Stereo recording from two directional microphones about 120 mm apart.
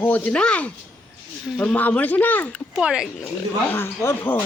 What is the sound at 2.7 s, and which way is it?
Speech, 5° right (ahead or behind).